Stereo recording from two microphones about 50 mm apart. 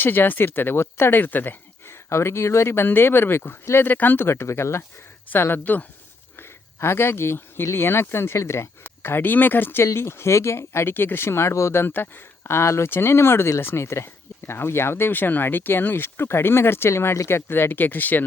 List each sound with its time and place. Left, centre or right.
0.0 s speech: left
2.0 s speech: left
4.3 s speech: left
5.3 s speech: left
6.7 s speech: left
8.8 s speech: left
9.8 s speech: left
10.7 s speech: left